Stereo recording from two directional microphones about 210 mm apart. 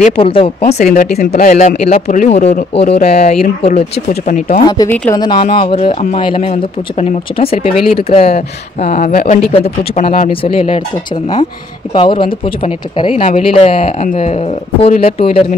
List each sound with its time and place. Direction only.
0.0 s speech: 25° left (ahead or behind)
4.6 s a woman's voice: 15° left (ahead or behind)
5.2 s speech: 25° left (ahead or behind); by 9.4 s 40° left (ahead or behind)
9.5 s speech: 25° left (ahead or behind)
11.9 s speech: 25° left (ahead or behind)